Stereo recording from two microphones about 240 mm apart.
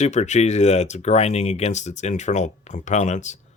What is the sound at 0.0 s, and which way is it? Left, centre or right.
Speech, left.